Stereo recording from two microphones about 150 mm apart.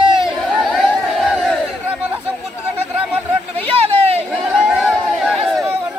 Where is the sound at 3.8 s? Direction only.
40° right (ahead or behind).